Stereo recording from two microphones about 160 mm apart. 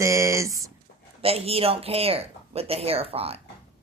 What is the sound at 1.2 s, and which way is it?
Speech, 40° right (ahead or behind).